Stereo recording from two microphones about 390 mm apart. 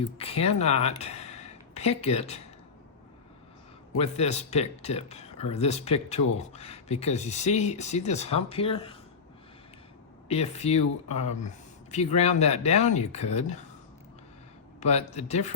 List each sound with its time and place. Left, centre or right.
0.0 s speech: centre
3.9 s speech: centre
10.2 s speech: centre
14.8 s speech: centre